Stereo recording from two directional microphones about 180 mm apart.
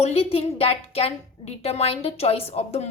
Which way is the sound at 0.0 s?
35° left (ahead or behind).